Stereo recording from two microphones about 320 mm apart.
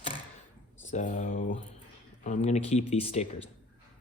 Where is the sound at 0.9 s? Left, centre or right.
Left.